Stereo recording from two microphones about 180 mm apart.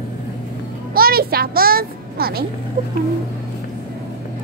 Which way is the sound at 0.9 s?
55° right (ahead or behind).